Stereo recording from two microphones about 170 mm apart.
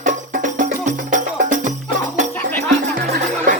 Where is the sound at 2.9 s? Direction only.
65° right (ahead or behind).